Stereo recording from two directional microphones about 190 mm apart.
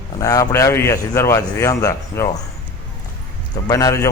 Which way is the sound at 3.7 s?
20° left (ahead or behind).